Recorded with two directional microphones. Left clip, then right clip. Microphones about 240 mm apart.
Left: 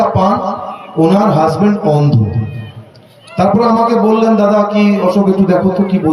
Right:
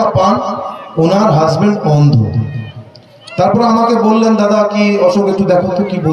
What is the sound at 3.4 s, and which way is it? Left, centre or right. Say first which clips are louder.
Music: even; right.